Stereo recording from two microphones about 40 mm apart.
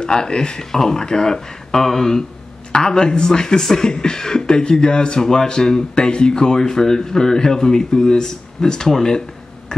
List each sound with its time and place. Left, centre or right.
0.0 s speech: centre